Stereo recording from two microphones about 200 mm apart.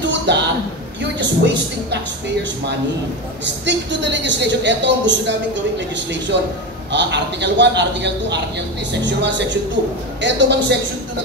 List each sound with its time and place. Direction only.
0.0 s a sound: 60° right (ahead or behind)
1.2 s a woman's voice: 60° right (ahead or behind)
3.4 s a woman's voice: 60° right (ahead or behind)
6.3 s a woman's voice: 60° right (ahead or behind)